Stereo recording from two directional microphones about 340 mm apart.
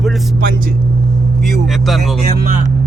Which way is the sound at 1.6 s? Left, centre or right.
Centre.